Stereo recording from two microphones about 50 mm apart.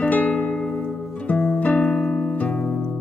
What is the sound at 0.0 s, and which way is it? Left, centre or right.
Music, left.